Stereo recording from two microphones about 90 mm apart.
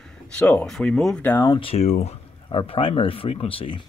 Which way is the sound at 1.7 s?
90° left.